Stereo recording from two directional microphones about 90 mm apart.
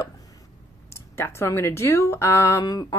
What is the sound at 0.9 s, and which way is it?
Speech, 30° left (ahead or behind).